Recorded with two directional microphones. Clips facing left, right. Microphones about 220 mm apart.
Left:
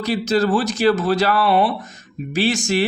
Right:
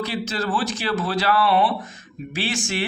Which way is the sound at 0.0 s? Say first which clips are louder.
Left 7 dB; 40° left (ahead or behind).